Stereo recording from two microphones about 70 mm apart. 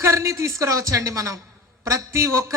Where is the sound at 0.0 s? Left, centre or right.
Right.